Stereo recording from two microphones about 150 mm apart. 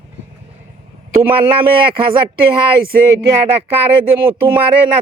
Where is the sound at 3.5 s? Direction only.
40° right (ahead or behind).